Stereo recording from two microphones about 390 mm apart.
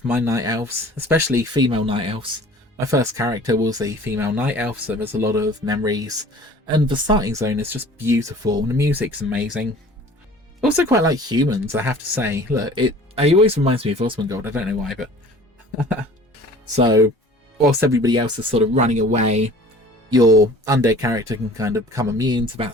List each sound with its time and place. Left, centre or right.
0.1 s speech: centre
16.7 s speech: centre